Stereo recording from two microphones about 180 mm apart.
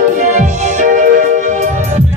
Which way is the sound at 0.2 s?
45° right (ahead or behind).